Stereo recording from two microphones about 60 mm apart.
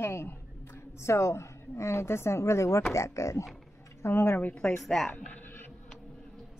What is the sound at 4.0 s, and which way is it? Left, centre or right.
Speech, left.